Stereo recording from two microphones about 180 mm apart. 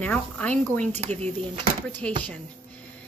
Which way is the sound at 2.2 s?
10° left (ahead or behind).